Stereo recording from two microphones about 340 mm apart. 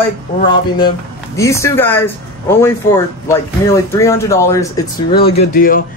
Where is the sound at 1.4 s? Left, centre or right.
Centre.